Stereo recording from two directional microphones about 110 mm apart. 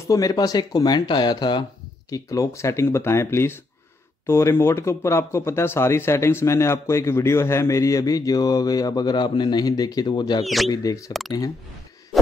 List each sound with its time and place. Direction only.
0.0 s speech: 30° left (ahead or behind)
2.0 s speech: 30° left (ahead or behind)
10.4 s speech: centre (ahead or behind)
10.7 s speech: 35° left (ahead or behind)